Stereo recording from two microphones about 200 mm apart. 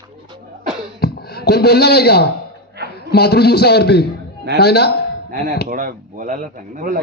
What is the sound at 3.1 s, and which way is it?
A man's voice, 55° left (ahead or behind).